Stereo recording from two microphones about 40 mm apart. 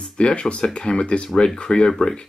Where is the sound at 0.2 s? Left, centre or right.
Left.